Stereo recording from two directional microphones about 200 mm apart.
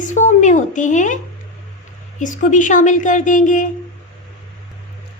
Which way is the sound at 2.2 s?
40° left (ahead or behind).